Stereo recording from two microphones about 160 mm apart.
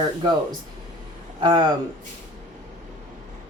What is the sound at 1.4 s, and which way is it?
Speech, 25° right (ahead or behind).